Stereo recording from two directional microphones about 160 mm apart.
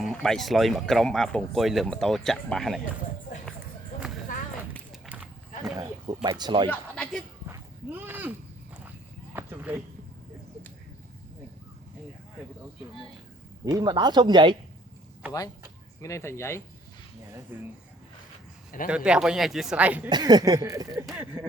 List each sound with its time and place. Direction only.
0.0 s speech: centre (ahead or behind)
5.0 s a sound: 10° right (ahead or behind)
5.7 s a sound: 20° right (ahead or behind)
6.2 s speech: 30° right (ahead or behind)
6.7 s speech: 5° left (ahead or behind)
7.4 s livestock: 15° right (ahead or behind)
9.3 s clip-clop: 15° right (ahead or behind)
13.7 s speech: 25° right (ahead or behind)
16.0 s speech: 20° left (ahead or behind)
17.5 s speech: 10° right (ahead or behind)
18.9 s speech: 5° right (ahead or behind)
20.1 s speech: 25° right (ahead or behind)